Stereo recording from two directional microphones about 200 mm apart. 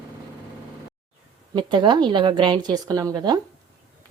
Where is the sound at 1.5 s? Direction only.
25° right (ahead or behind).